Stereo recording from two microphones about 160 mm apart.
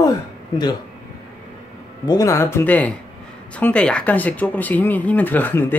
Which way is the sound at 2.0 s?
20° left (ahead or behind).